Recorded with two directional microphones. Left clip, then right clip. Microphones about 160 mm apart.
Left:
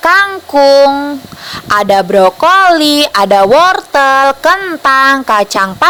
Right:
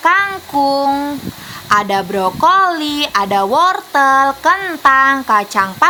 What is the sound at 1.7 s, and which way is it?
A woman's voice, 45° left (ahead or behind).